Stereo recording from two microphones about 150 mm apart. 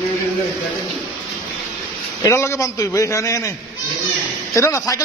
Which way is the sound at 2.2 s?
20° left (ahead or behind).